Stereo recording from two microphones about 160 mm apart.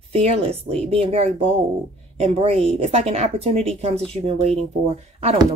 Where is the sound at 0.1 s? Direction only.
40° right (ahead or behind).